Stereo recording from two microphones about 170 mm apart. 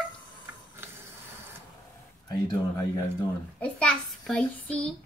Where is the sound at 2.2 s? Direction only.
20° left (ahead or behind).